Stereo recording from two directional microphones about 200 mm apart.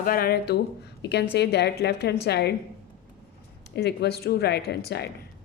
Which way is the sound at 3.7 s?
55° left (ahead or behind).